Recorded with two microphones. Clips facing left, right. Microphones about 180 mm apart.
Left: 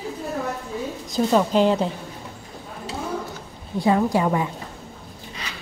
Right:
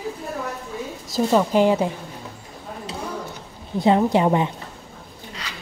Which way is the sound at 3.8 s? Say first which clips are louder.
Right 2 dB; 20° right (ahead or behind).